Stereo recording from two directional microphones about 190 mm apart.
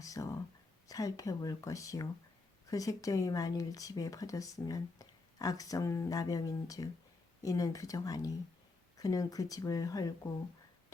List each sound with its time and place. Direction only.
0.0 s whispering: 15° left (ahead or behind)
0.9 s speech: 20° left (ahead or behind)